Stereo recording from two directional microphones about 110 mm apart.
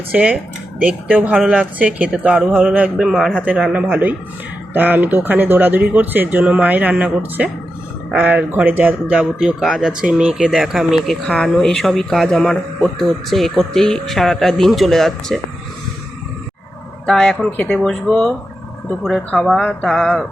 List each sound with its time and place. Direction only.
0.1 s speech: 10° right (ahead or behind)
3.4 s speech: 10° right (ahead or behind)
17.1 s speech: 5° left (ahead or behind)